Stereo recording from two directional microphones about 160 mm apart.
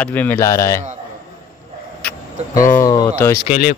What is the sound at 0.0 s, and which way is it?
Speech, 10° left (ahead or behind).